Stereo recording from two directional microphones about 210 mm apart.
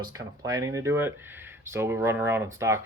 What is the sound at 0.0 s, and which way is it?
Speech, 15° right (ahead or behind).